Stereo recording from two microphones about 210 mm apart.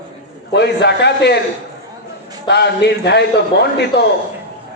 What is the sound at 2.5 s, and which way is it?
Speech, 55° left (ahead or behind).